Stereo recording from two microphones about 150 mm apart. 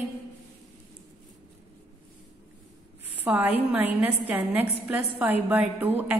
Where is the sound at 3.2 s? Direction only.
10° right (ahead or behind).